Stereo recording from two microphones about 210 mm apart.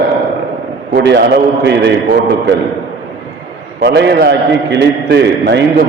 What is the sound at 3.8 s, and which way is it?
A man's voice, 55° right (ahead or behind).